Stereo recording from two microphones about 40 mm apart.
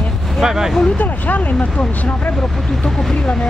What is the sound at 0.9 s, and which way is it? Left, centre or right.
Speech, left.